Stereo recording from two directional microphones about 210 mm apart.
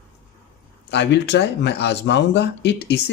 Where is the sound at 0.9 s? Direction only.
55° left (ahead or behind).